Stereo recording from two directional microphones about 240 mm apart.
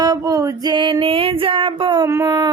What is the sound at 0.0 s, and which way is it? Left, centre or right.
Music, centre.